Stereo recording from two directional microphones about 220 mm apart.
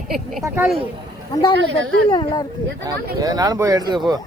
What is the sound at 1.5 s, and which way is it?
Speech, 60° right (ahead or behind).